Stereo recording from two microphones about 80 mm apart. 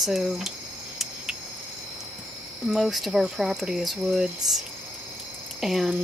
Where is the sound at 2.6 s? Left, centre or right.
Centre.